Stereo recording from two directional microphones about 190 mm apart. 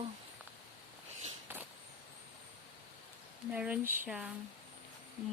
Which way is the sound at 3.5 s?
5° right (ahead or behind).